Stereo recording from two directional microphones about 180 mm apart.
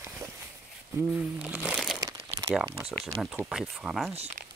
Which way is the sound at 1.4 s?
5° right (ahead or behind).